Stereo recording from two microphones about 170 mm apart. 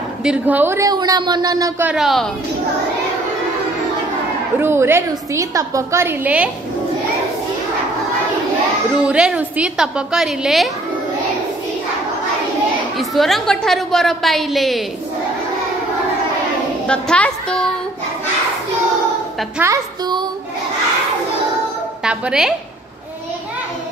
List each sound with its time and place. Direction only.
0.2 s a woman's voice: 5° right (ahead or behind); by 1.7 s 25° right (ahead or behind)
1.8 s a woman's voice: 5° right (ahead or behind)
4.6 s a woman's voice: 15° right (ahead or behind)
8.9 s a woman's voice: 5° right (ahead or behind)
12.9 s a woman's voice: centre (ahead or behind)
16.8 s a woman's voice: 5° left (ahead or behind)
19.6 s a woman's voice: 20° right (ahead or behind)
22.0 s a woman's voice: 5° right (ahead or behind)